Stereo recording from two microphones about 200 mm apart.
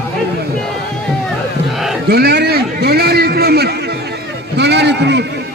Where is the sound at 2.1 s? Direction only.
50° right (ahead or behind).